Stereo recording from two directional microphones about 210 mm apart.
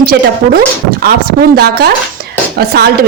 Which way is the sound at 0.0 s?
45° right (ahead or behind).